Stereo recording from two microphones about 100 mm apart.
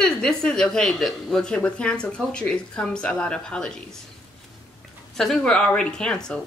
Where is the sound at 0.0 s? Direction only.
5° left (ahead or behind).